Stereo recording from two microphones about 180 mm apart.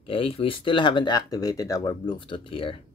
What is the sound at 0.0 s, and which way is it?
Speech, 30° left (ahead or behind).